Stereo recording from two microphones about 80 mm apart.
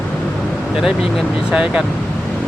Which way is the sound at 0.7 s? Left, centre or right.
Centre.